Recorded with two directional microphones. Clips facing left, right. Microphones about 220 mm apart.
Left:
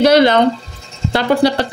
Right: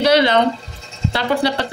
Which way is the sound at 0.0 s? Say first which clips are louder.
Left 4 dB; 45° left (ahead or behind).